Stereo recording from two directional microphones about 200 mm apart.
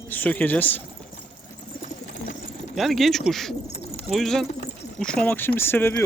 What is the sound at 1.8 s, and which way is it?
Bird, 40° left (ahead or behind).